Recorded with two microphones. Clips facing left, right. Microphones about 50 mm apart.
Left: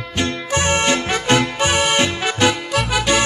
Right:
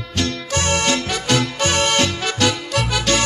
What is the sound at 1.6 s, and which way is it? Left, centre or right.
Music, centre.